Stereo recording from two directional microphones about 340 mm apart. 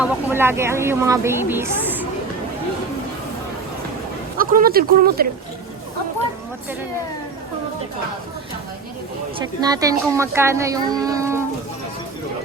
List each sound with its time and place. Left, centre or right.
0.0 s speech: centre
4.4 s speech: right
9.4 s speech: centre